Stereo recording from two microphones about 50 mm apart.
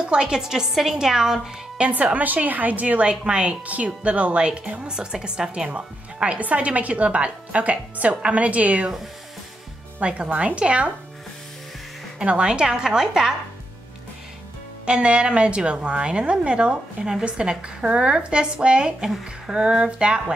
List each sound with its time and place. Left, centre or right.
0.0 s a woman's voice: centre
1.8 s speech: right
2.1 s speech: right
10.0 s speech: right
12.2 s a woman's voice: centre
14.9 s a woman's voice: right